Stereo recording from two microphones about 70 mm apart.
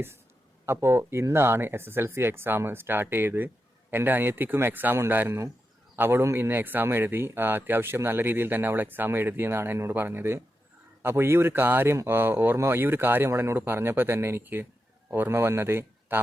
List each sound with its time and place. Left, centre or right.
0.6 s speech: right